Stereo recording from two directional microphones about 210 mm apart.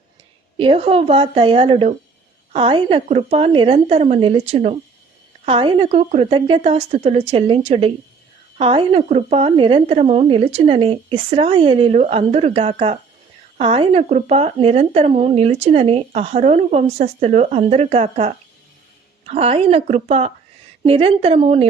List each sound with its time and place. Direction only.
0.5 s speech: 25° right (ahead or behind)